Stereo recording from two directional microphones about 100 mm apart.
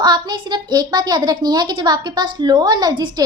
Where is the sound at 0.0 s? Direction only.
45° right (ahead or behind).